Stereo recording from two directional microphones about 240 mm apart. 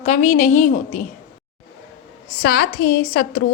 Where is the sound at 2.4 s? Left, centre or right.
Left.